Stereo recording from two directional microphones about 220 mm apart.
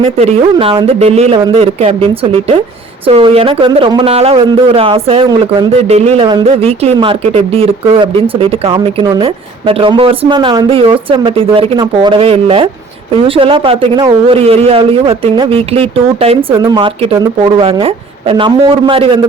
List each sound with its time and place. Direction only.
0.5 s speech: 20° right (ahead or behind)
3.1 s speech: 25° right (ahead or behind)